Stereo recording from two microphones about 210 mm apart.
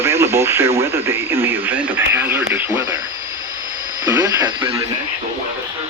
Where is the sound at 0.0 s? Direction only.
10° right (ahead or behind).